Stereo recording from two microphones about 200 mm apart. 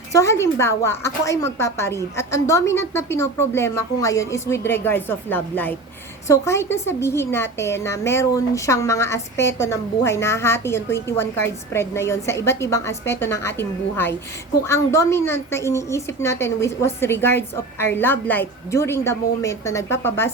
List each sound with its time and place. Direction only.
0.1 s a woman's voice: 15° left (ahead or behind)